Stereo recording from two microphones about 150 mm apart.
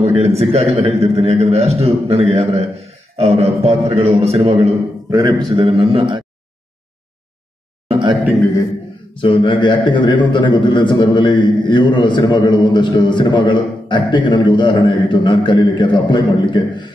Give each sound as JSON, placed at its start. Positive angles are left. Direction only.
{"t": 0.0, "sound": "a man's voice", "side_deg": -40}
{"t": 7.9, "sound": "a sound", "side_deg": -35}
{"t": 9.2, "sound": "a man's voice", "side_deg": 35}